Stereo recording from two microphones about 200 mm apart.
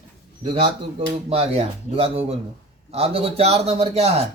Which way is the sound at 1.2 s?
30° right (ahead or behind).